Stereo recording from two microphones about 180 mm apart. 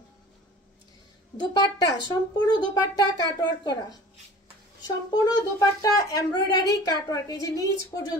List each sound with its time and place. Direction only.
1.4 s speech: 20° left (ahead or behind)
5.1 s speech: 20° left (ahead or behind)